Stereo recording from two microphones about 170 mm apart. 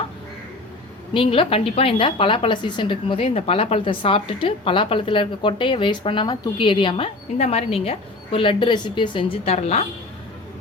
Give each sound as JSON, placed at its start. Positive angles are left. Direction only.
{"t": 1.1, "sound": "a woman's voice", "side_deg": 30}